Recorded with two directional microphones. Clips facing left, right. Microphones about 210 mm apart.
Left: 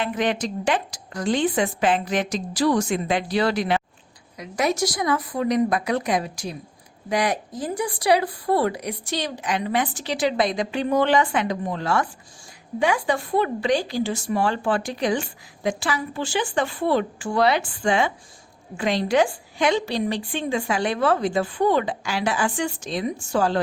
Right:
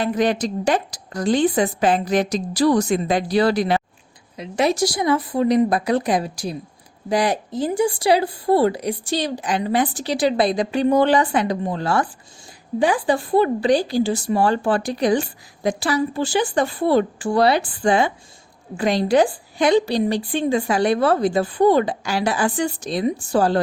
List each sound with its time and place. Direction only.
0.0 s speech: 40° right (ahead or behind)